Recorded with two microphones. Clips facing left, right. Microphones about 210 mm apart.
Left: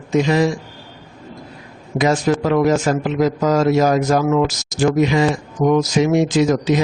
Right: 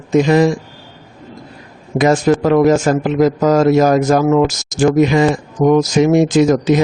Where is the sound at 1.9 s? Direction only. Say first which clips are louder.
Right 4 dB; 45° right (ahead or behind).